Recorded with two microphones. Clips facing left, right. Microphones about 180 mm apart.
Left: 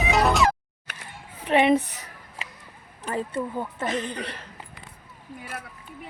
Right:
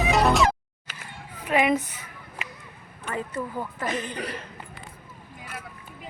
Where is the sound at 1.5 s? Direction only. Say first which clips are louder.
Left 3 dB; 30° left (ahead or behind).